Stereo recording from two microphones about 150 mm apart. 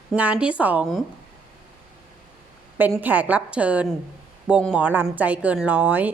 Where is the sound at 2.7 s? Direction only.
10° right (ahead or behind).